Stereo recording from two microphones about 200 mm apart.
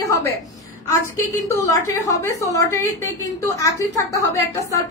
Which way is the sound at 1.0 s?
15° left (ahead or behind).